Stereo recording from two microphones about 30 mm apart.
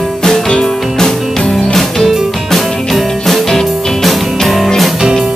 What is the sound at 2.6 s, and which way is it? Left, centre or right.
Music, centre.